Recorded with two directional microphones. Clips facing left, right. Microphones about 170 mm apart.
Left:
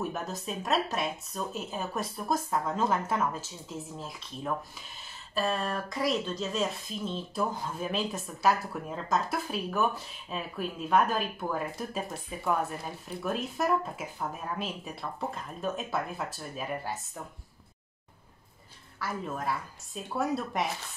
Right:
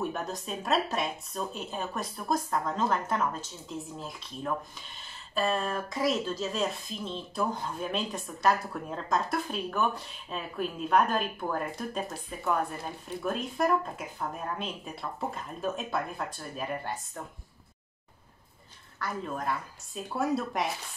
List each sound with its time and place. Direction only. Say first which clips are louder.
0.1 s speech: right 1 dB; centre (ahead or behind)
18.9 s speech: even; 5° left (ahead or behind)